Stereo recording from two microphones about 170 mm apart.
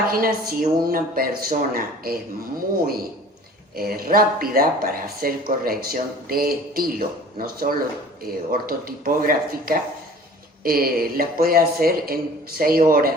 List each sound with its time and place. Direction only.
0.1 s speech: 60° right (ahead or behind)